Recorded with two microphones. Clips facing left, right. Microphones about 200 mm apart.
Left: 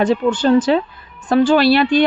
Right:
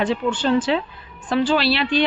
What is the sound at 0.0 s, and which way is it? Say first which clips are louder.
Speech: left 6 dB; 40° left (ahead or behind).